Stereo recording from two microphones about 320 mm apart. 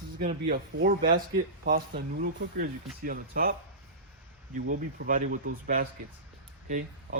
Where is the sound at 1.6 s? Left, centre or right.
Right.